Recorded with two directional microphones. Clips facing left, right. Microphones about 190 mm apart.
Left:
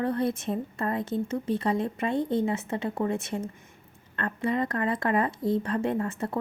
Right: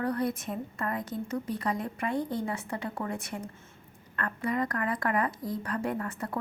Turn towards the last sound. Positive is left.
turn(degrees=25)  # may be behind; listen again after turning